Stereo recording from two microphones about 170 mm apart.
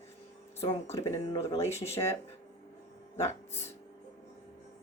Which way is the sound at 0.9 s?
20° left (ahead or behind).